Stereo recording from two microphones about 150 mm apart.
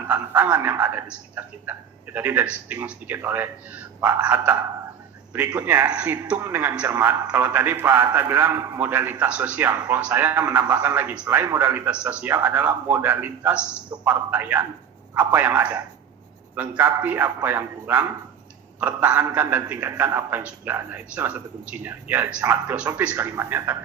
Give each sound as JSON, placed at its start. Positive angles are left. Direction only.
{"t": 0.1, "sound": "a man's voice", "side_deg": -15}
{"t": 5.5, "sound": "a man's voice", "side_deg": -10}